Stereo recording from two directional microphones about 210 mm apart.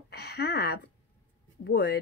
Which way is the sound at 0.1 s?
50° left (ahead or behind).